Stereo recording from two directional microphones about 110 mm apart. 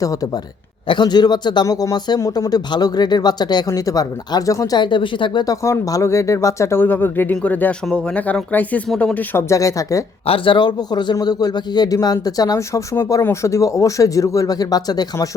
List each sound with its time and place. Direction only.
0.0 s speech: 30° left (ahead or behind)
0.9 s speech: 40° left (ahead or behind)
5.6 s speech: 30° left (ahead or behind); by 9.4 s 15° left (ahead or behind)
9.5 s speech: 30° left (ahead or behind)
10.2 s speech: 55° left (ahead or behind); by 15.3 s 35° left (ahead or behind)